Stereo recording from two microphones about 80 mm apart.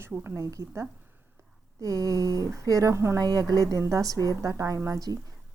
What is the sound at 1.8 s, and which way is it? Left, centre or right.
A woman's voice, right.